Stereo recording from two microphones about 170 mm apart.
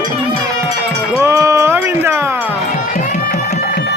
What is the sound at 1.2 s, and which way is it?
Music, 15° right (ahead or behind).